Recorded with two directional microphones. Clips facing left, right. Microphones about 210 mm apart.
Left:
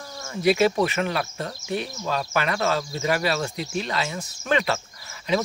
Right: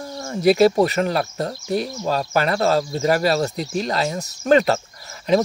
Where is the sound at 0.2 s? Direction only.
40° right (ahead or behind).